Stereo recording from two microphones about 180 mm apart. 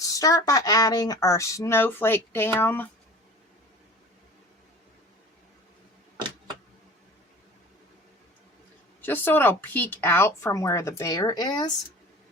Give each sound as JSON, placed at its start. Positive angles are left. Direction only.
{"t": 0.0, "sound": "speech", "side_deg": 20}
{"t": 9.0, "sound": "speech", "side_deg": 10}